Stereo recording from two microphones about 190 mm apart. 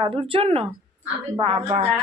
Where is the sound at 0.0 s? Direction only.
30° right (ahead or behind).